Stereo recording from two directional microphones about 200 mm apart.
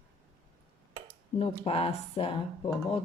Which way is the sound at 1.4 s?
30° left (ahead or behind).